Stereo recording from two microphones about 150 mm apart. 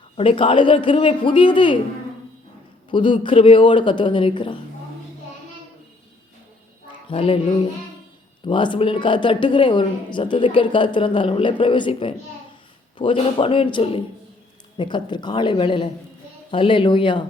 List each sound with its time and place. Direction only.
0.2 s speech: 40° left (ahead or behind)
2.9 s speech: 35° left (ahead or behind)
7.1 s speech: 35° left (ahead or behind)